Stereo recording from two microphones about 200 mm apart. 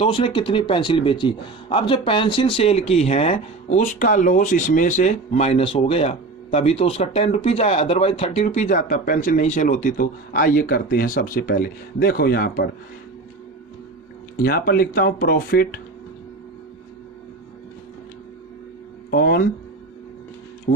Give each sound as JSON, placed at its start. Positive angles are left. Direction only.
{"t": 0.0, "sound": "speech", "side_deg": 25}
{"t": 14.4, "sound": "speech", "side_deg": 50}
{"t": 19.1, "sound": "speech", "side_deg": 50}
{"t": 20.7, "sound": "speech", "side_deg": 50}